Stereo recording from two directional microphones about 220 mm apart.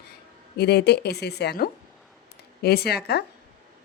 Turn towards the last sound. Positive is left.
turn(degrees=45)  # may be behind; listen again after turning